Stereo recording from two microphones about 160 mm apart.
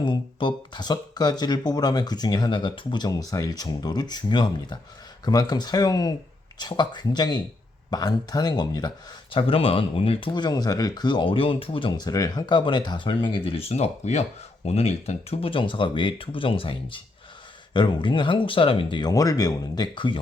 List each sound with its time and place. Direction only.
0.0 s speech: 30° left (ahead or behind)